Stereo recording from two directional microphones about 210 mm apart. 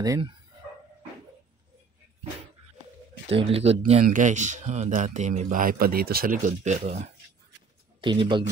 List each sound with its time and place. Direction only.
0.0 s speech: 15° right (ahead or behind)
3.3 s speech: 25° right (ahead or behind)
8.0 s speech: 25° right (ahead or behind)